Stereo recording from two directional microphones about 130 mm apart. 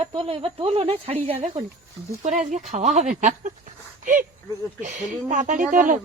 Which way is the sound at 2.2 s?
70° right (ahead or behind).